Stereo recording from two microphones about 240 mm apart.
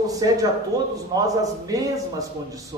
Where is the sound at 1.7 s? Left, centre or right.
Centre.